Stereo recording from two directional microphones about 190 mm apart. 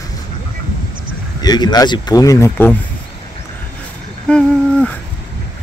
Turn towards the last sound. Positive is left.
turn(degrees=5)  # may be behind; listen again after turning